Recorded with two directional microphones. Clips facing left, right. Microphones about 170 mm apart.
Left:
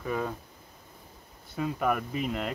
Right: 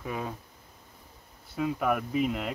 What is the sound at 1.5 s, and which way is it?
Speech, 5° right (ahead or behind).